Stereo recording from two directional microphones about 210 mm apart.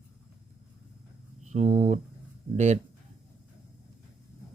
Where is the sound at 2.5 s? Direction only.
35° right (ahead or behind).